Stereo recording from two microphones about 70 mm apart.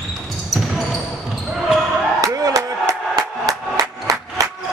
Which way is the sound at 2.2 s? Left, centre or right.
Right.